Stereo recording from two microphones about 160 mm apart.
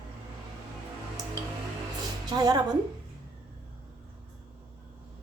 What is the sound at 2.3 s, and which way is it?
Speech, 25° right (ahead or behind).